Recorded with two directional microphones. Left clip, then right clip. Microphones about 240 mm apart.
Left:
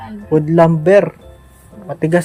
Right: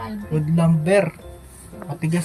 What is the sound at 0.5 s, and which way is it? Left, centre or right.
Speech, centre.